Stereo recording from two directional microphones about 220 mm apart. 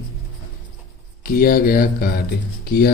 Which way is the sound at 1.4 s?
45° left (ahead or behind).